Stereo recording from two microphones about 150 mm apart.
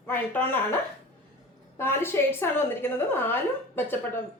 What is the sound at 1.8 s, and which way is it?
A woman's voice, 15° left (ahead or behind).